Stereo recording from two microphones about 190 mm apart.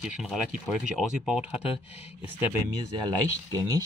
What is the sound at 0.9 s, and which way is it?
Speech, 5° right (ahead or behind).